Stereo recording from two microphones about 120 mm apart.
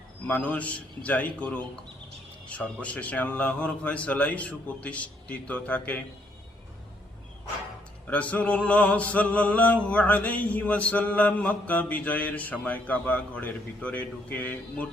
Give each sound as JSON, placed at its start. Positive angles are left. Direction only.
{"t": 0.3, "sound": "music", "side_deg": 10}
{"t": 8.0, "sound": "music", "side_deg": 10}